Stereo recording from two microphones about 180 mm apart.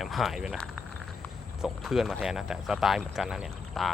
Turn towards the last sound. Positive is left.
turn(degrees=0)  # may be behind; listen again after turning